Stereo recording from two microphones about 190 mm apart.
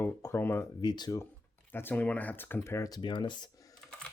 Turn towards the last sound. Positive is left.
turn(degrees=25)  # may be behind; listen again after turning